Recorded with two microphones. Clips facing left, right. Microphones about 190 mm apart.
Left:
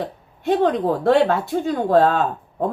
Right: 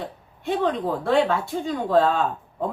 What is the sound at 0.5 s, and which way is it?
Speech, 45° left (ahead or behind).